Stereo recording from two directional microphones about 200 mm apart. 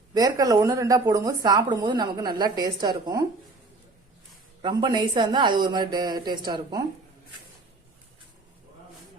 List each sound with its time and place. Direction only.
0.1 s speech: 20° right (ahead or behind)
4.6 s speech: 20° right (ahead or behind)